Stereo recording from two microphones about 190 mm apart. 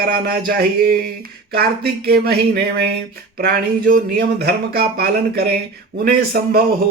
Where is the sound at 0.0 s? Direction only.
50° right (ahead or behind).